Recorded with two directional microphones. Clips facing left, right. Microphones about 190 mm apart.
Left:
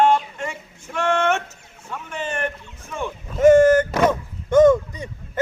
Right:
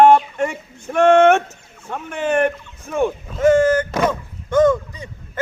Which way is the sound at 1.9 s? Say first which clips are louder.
Right 8 dB; 55° right (ahead or behind).